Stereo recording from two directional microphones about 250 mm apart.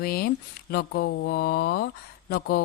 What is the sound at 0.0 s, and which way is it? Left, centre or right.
A woman's voice, left.